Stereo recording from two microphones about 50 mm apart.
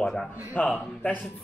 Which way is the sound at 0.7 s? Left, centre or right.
Left.